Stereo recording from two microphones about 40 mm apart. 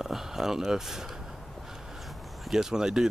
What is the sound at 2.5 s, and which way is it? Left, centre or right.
Speech, centre.